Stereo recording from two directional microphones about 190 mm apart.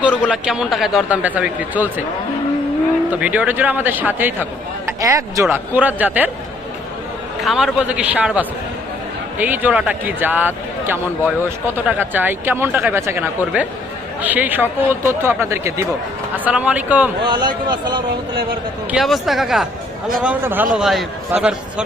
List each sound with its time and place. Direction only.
0.0 s a man's voice: 5° right (ahead or behind)
3.1 s speech: 10° right (ahead or behind)
7.4 s a man's voice: centre (ahead or behind)
17.2 s a man's voice: 25° right (ahead or behind)
18.9 s a man's voice: centre (ahead or behind)